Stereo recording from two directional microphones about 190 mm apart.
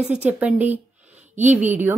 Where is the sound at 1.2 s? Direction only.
40° right (ahead or behind).